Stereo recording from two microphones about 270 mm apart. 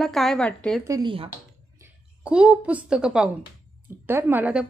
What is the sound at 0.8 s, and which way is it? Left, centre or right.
Speech, centre.